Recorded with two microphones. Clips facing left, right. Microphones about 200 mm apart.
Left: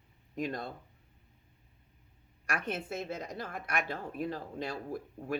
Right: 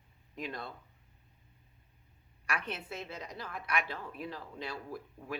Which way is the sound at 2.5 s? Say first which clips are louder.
Left 3 dB; 45° left (ahead or behind).